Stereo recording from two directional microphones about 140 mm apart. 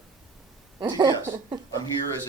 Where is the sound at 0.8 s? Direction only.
30° right (ahead or behind).